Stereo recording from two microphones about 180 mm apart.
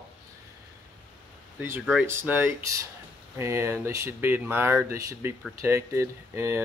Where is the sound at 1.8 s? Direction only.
Centre (ahead or behind).